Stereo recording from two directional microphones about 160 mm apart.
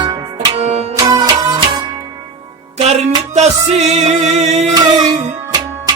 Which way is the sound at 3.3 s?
45° right (ahead or behind).